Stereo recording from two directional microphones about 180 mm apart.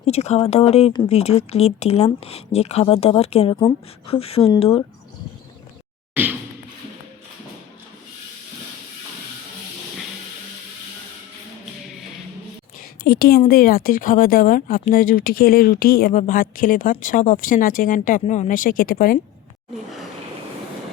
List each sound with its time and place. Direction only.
0.0 s speech: 35° left (ahead or behind)
13.1 s a woman's voice: 55° left (ahead or behind)